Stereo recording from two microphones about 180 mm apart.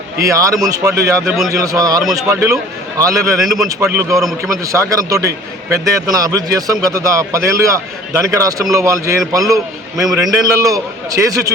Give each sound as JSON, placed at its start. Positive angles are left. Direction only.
{"t": 0.2, "sound": "speech", "side_deg": -15}
{"t": 4.2, "sound": "a man's voice", "side_deg": 0}
{"t": 4.6, "sound": "speech", "side_deg": -15}